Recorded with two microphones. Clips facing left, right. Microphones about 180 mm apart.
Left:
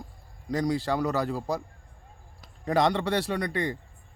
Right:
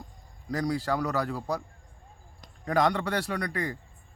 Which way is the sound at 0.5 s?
25° left (ahead or behind).